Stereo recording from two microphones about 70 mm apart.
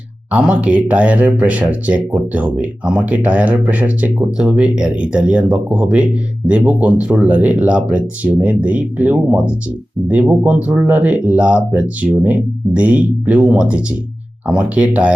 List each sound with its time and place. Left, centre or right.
0.3 s speech: centre